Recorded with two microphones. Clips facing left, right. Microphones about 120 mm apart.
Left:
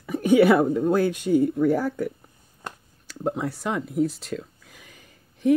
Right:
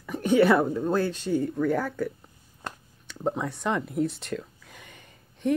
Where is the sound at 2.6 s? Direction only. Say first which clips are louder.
Even; 5° left (ahead or behind).